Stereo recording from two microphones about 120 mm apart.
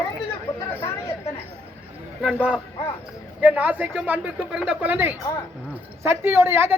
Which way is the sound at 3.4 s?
10° right (ahead or behind).